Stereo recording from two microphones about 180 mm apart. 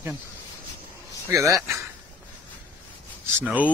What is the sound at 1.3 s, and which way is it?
Speech, 15° right (ahead or behind).